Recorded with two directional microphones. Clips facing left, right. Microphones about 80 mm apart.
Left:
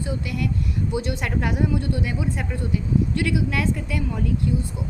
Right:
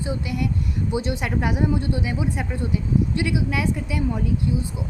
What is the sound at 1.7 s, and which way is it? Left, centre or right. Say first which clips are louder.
Speech: right 1 dB; right.